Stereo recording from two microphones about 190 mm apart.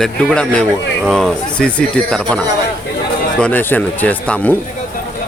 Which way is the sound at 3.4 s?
10° left (ahead or behind).